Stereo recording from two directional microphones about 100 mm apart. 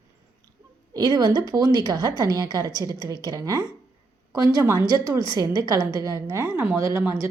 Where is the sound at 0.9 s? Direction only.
40° right (ahead or behind).